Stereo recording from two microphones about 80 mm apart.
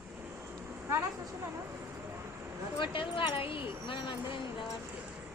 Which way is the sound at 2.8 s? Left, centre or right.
Left.